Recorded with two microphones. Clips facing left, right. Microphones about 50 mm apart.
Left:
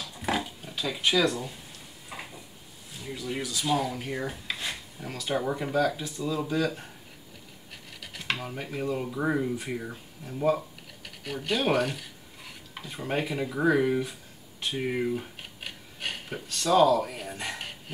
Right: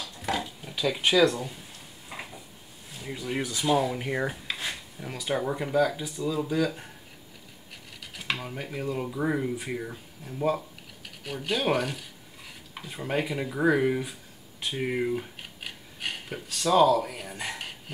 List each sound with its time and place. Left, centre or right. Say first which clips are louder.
0.2 s a sound: left 1 dB; centre
1.0 s speech: right 3 dB; right
3.0 s speech: right 2 dB; right
4.3 s speech: right 1 dB; centre
8.1 s speech: even; centre
13.2 s speech: right 1 dB; centre
14.7 s a sound: right 1 dB; centre
16.4 s speech: even; centre
17.0 s speech: left 2 dB; centre
17.4 s mechanisms: even; centre